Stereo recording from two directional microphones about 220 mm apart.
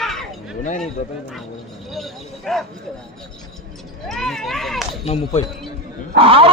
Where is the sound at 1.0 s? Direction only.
35° left (ahead or behind).